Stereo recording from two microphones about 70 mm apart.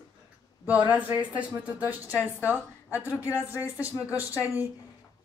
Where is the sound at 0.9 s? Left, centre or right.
Centre.